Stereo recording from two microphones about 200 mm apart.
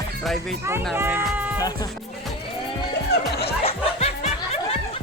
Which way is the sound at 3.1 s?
55° left (ahead or behind).